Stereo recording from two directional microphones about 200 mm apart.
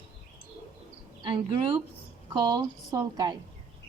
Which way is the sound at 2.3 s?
20° right (ahead or behind).